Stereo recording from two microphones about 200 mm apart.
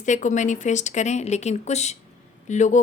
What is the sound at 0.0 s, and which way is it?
A woman's voice, 40° left (ahead or behind).